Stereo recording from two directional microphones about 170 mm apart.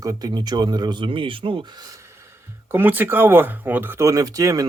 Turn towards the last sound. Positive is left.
turn(degrees=-20)  # may be behind; listen again after turning